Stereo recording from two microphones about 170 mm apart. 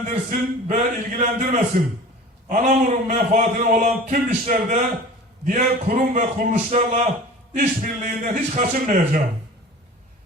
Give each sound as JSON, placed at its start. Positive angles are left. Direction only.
{"t": 0.1, "sound": "a man's voice", "side_deg": -50}